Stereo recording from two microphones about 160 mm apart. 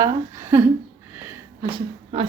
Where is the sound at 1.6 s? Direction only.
30° right (ahead or behind).